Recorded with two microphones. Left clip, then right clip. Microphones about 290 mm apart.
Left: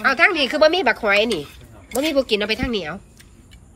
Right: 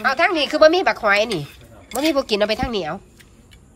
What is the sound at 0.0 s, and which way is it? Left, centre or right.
Speech, centre.